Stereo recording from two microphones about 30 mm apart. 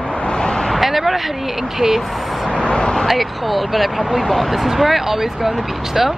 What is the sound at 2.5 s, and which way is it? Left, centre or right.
Speech, left.